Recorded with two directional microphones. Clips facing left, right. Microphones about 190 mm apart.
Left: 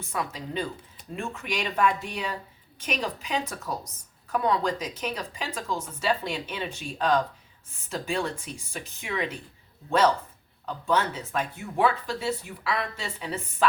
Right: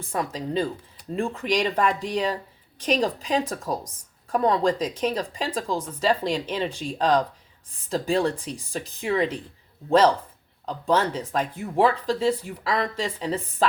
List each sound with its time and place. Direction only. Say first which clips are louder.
0.1 s speech: right 5 dB; 35° right (ahead or behind)
10.8 s speech: right 3 dB; 35° right (ahead or behind)